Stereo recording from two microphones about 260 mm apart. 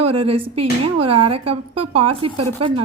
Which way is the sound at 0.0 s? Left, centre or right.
Right.